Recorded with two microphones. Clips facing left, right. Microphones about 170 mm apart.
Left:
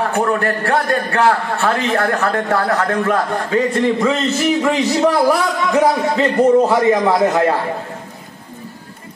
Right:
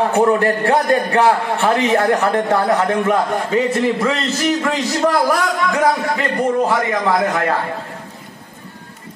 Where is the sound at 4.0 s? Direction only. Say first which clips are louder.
Left 2 dB; centre (ahead or behind).